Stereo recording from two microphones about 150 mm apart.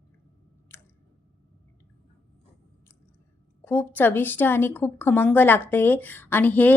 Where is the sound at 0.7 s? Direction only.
15° left (ahead or behind).